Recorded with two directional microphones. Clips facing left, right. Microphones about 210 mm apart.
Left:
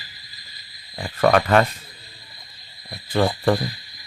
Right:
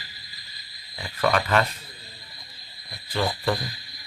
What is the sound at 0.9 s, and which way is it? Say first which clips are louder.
Speech: left 6 dB; 50° left (ahead or behind).